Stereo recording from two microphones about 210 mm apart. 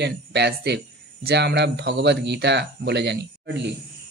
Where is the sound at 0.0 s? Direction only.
55° right (ahead or behind).